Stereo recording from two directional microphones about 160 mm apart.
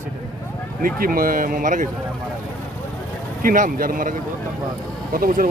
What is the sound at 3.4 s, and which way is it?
Speech, 60° right (ahead or behind).